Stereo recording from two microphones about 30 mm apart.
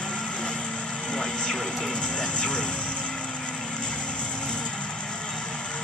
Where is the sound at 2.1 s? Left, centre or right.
Left.